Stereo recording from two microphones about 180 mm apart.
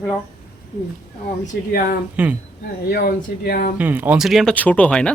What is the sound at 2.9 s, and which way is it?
Speech, 55° left (ahead or behind).